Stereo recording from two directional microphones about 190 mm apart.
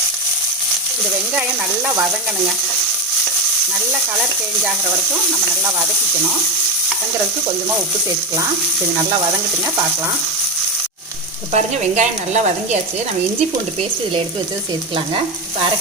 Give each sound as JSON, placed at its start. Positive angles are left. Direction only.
{"t": 1.3, "sound": "speech", "side_deg": -5}
{"t": 11.5, "sound": "speech", "side_deg": -35}